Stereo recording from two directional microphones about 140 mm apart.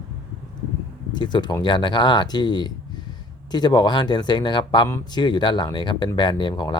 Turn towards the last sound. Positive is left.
turn(degrees=35)  # may be behind; listen again after turning